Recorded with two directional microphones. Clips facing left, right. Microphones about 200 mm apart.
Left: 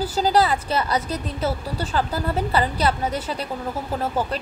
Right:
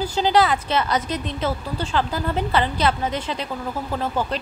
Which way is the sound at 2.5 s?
35° left (ahead or behind).